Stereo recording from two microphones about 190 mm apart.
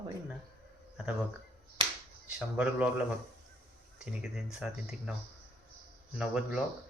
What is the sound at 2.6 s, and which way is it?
Speech, 5° right (ahead or behind).